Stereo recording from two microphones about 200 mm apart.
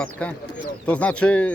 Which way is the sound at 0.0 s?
5° left (ahead or behind).